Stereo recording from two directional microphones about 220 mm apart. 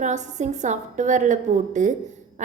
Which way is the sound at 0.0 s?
35° right (ahead or behind).